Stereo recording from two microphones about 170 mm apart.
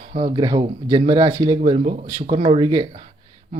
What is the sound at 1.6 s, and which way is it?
Speech, 35° right (ahead or behind).